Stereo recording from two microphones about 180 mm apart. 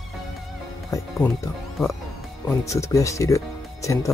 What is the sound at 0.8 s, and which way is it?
Speech, 15° left (ahead or behind).